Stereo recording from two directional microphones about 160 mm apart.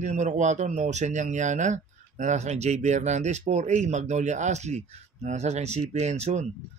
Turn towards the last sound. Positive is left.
turn(degrees=-45)  # may be behind; listen again after turning